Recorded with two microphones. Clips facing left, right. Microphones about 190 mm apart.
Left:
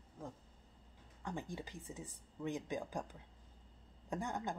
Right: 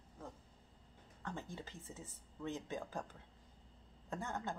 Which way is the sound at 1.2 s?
15° left (ahead or behind).